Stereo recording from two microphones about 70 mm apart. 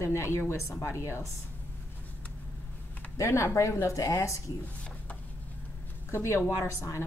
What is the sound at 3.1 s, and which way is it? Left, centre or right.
Speech, left.